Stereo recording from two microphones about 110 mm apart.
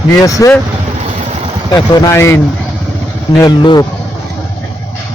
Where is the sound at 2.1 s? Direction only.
25° left (ahead or behind).